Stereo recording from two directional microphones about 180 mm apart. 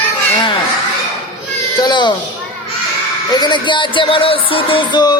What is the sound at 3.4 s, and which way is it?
A man's voice, 25° left (ahead or behind).